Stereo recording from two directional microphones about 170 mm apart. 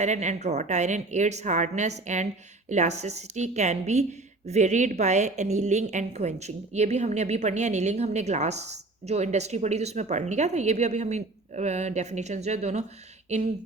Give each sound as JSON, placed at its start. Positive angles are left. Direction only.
{"t": 0.0, "sound": "a woman's voice", "side_deg": -45}